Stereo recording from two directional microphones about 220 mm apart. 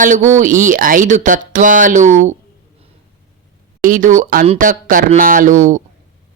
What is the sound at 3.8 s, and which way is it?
Speech, 35° right (ahead or behind).